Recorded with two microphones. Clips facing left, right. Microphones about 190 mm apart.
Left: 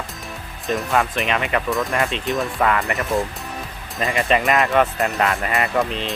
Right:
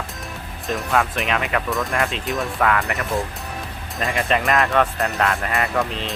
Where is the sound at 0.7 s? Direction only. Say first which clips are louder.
Left 1 dB; centre (ahead or behind).